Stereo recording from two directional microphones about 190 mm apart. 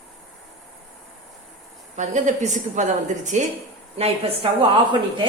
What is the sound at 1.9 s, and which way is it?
A woman's voice, 40° right (ahead or behind).